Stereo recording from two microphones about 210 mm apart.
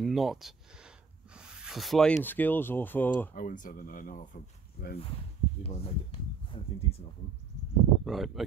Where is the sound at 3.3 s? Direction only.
40° left (ahead or behind).